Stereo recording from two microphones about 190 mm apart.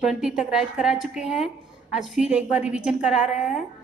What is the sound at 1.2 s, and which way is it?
Speech, 40° left (ahead or behind).